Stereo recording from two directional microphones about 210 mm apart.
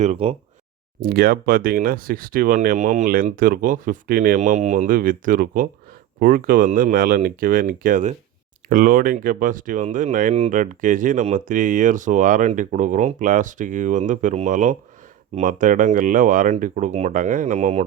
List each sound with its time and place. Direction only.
0.0 s speech: 30° right (ahead or behind)
1.0 s speech: 45° right (ahead or behind)